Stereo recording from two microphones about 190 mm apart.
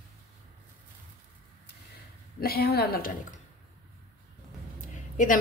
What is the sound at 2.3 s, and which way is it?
A woman's voice, 55° left (ahead or behind).